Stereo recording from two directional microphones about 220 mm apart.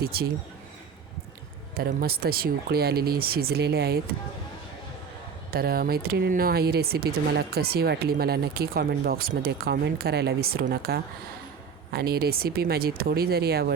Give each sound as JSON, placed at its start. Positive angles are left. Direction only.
{"t": 0.0, "sound": "speech", "side_deg": -45}
{"t": 1.7, "sound": "speech", "side_deg": -45}
{"t": 5.5, "sound": "speech", "side_deg": -45}